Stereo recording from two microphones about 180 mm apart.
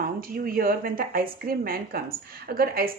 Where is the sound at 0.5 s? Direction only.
55° right (ahead or behind).